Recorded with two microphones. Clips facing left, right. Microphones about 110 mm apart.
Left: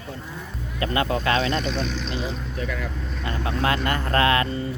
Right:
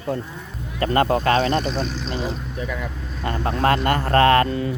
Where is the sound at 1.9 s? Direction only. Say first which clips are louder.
Right 1 dB; 5° right (ahead or behind).